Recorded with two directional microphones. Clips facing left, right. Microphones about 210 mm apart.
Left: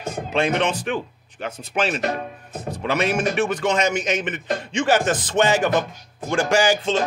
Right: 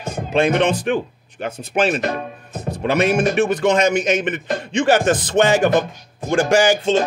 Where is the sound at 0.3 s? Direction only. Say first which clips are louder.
Right 5 dB; 55° right (ahead or behind).